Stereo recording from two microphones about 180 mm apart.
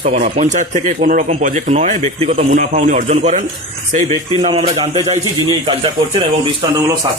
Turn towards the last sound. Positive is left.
turn(degrees=-30)  # may be behind; listen again after turning